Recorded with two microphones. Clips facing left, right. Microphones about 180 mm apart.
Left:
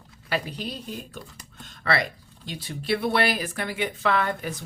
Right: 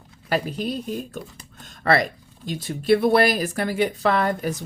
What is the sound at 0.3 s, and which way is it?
Speech, 45° right (ahead or behind).